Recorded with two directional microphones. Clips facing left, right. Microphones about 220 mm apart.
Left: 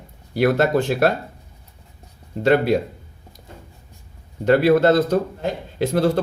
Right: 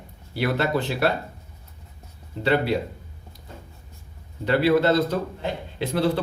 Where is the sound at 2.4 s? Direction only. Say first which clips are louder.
Left 5 dB; 45° left (ahead or behind).